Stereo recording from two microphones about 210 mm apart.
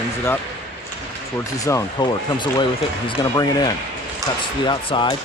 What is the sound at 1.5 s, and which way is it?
Speech, 15° left (ahead or behind).